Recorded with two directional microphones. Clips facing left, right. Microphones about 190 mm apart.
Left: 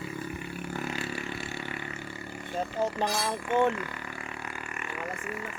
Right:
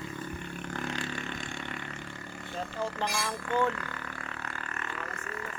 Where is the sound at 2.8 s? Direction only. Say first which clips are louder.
Left 4 dB; 15° left (ahead or behind).